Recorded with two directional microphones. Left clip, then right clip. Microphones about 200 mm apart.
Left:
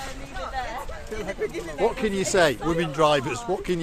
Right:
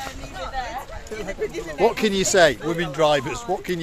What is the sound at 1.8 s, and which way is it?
Speech, 55° right (ahead or behind).